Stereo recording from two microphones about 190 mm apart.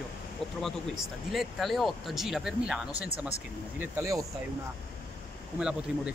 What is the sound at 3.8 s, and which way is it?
Speech, 15° right (ahead or behind).